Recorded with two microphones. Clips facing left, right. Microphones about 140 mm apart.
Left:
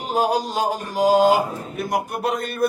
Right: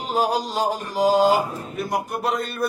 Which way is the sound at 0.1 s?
50° left (ahead or behind).